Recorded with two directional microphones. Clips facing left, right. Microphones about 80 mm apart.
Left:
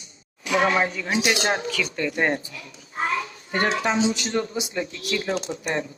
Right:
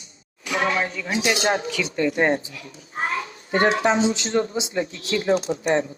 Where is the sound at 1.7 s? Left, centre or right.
Centre.